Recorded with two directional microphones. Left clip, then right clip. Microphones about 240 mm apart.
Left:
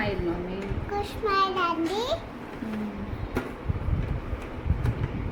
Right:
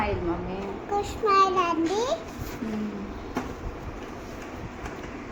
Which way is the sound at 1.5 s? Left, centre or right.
Centre.